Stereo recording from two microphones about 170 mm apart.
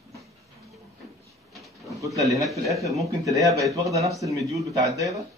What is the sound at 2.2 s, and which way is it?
Speech, 20° right (ahead or behind).